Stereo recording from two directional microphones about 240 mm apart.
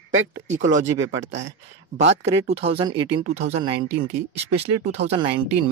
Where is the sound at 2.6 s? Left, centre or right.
Right.